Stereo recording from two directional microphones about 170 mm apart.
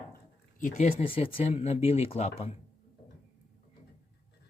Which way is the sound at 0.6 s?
40° left (ahead or behind).